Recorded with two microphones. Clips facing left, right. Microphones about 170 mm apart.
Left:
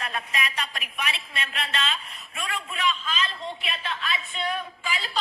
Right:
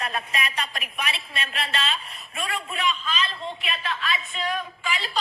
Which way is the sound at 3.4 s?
Centre (ahead or behind).